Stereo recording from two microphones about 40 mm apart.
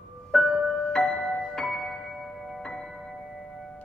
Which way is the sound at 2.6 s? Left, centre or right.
Centre.